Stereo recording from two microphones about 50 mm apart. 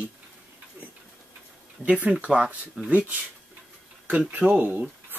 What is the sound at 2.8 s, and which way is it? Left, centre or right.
Speech, centre.